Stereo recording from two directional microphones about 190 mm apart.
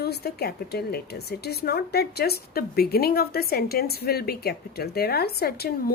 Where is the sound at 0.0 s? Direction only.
55° left (ahead or behind).